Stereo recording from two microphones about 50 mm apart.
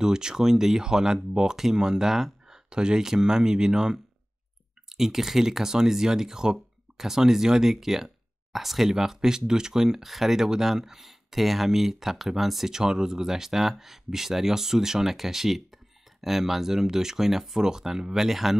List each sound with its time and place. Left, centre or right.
0.0 s speech: centre